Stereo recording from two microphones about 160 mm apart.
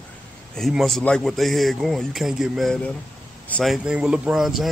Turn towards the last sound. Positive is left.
turn(degrees=0)  # may be behind; listen again after turning